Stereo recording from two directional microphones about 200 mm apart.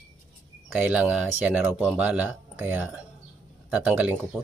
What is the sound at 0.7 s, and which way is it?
A man's voice, 5° right (ahead or behind).